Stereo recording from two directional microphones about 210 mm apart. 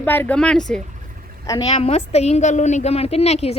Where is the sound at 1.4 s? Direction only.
20° left (ahead or behind).